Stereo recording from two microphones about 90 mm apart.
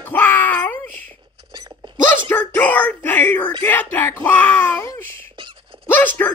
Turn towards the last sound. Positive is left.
turn(degrees=20)  # may be behind; listen again after turning